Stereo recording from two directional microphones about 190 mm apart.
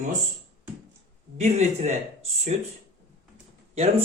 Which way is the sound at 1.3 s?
35° right (ahead or behind).